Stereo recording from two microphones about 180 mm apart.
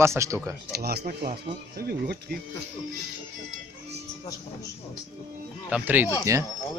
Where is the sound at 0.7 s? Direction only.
60° right (ahead or behind).